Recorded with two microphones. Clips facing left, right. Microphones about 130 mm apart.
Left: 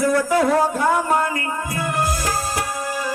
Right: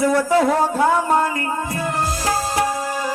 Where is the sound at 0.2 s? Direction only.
25° right (ahead or behind).